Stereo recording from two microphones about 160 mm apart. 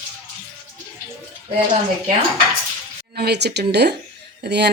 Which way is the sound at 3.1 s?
90° right.